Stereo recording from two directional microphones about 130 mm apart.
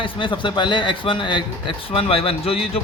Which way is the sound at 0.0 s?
40° left (ahead or behind).